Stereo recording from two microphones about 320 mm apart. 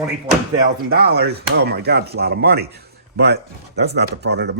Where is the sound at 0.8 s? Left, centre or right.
Right.